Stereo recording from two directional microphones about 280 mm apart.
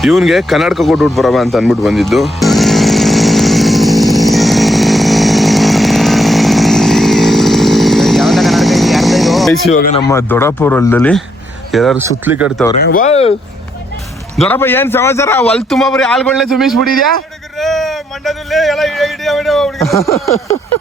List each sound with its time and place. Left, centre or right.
0.0 s a sound: centre
9.7 s speech: left
10.1 s speech: centre
12.8 s speech: left
14.3 s speech: centre